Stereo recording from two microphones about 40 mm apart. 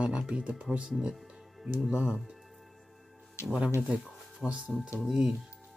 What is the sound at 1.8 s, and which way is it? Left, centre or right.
Speech, right.